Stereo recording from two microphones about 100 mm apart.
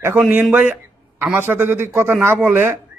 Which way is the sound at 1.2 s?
20° right (ahead or behind).